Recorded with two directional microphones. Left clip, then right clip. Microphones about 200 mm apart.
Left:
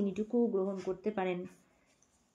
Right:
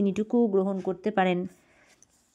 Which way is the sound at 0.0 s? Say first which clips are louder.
Right 7 dB; 50° right (ahead or behind).